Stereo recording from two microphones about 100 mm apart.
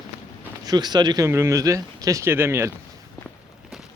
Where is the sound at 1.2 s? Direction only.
30° right (ahead or behind).